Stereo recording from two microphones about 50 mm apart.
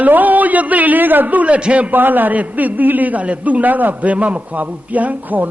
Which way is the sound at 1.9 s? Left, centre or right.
Right.